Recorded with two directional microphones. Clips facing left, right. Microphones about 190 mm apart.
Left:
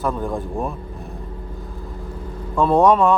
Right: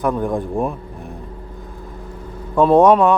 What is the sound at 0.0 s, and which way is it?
Speech, 15° right (ahead or behind).